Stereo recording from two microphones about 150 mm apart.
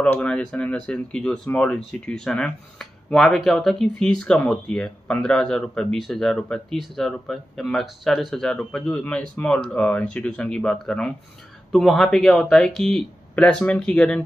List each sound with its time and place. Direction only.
0.0 s speech: 10° left (ahead or behind)